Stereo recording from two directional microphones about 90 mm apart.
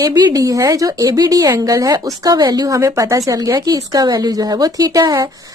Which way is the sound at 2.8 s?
35° right (ahead or behind).